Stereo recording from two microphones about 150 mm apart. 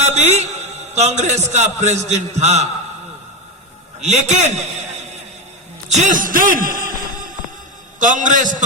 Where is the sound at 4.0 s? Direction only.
50° right (ahead or behind).